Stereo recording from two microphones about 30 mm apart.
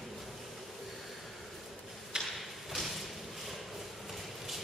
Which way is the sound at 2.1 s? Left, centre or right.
Right.